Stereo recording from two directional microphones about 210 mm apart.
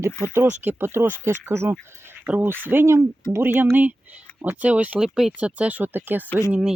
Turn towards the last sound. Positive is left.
turn(degrees=15)  # may be behind; listen again after turning